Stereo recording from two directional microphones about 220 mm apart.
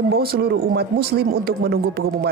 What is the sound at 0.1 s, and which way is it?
Speech, 45° right (ahead or behind).